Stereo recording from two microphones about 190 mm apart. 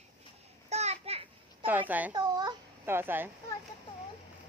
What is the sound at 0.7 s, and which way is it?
Children playing, 35° right (ahead or behind).